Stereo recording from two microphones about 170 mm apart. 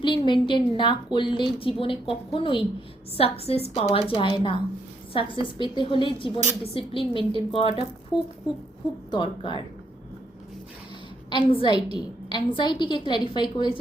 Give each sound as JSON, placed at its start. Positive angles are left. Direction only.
{"t": 0.0, "sound": "a woman's voice", "side_deg": 30}
{"t": 9.0, "sound": "a woman's voice", "side_deg": 30}
{"t": 11.3, "sound": "a woman's voice", "side_deg": 30}